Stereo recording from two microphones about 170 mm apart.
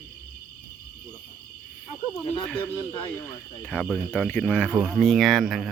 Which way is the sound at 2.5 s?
10° left (ahead or behind).